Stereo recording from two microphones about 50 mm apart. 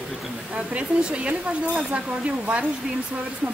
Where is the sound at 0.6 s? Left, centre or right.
Right.